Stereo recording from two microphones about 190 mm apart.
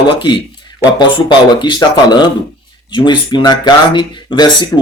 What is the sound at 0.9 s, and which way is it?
Speech, 25° left (ahead or behind).